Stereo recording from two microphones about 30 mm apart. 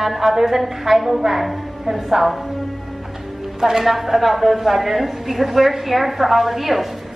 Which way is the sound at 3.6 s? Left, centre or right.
Centre.